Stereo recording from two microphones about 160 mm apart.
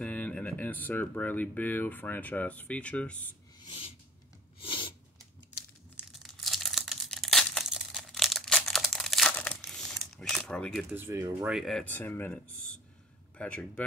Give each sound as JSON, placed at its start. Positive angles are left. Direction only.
{"t": 0.0, "sound": "speech", "side_deg": 10}
{"t": 4.6, "sound": "a sound", "side_deg": 30}
{"t": 6.2, "sound": "crumpling", "side_deg": 0}
{"t": 10.9, "sound": "speech", "side_deg": -15}
{"t": 11.5, "sound": "speech", "side_deg": 0}